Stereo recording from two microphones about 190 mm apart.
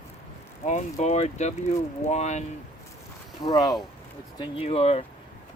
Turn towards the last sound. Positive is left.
turn(degrees=30)  # may be behind; listen again after turning